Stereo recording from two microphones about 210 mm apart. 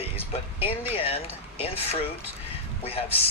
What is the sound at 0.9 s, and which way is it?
Speech, 25° left (ahead or behind).